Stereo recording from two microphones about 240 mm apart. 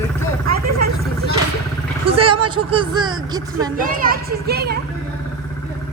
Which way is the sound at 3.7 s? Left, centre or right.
Right.